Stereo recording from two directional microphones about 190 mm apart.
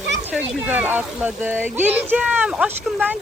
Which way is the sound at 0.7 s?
10° right (ahead or behind).